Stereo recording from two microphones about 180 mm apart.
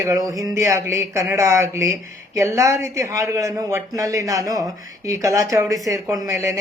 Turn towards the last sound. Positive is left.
turn(degrees=-15)  # may be behind; listen again after turning